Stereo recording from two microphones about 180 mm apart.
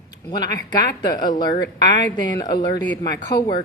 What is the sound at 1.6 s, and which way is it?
Speech, 75° left (ahead or behind).